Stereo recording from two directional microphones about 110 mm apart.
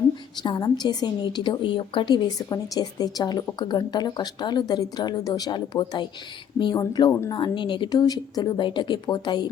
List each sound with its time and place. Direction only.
0.4 s a woman's voice: 40° left (ahead or behind)